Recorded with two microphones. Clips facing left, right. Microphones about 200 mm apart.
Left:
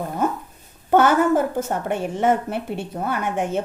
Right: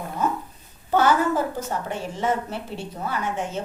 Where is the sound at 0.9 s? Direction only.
55° left (ahead or behind).